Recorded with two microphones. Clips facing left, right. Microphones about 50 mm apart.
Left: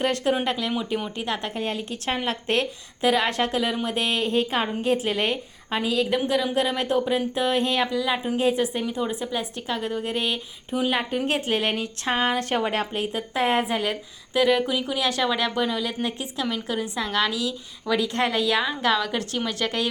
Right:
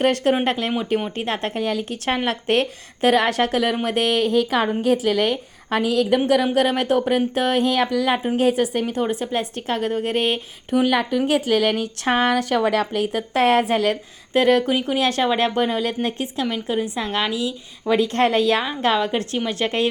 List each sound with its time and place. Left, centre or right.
0.0 s a woman's voice: right
1.2 s speech: right
2.0 s a woman's voice: right
8.4 s speech: right
14.3 s a woman's voice: right
16.5 s a woman's voice: right
17.9 s speech: right
18.6 s a woman's voice: right